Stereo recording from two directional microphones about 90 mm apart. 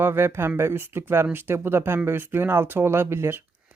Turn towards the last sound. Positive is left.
turn(degrees=-25)  # may be behind; listen again after turning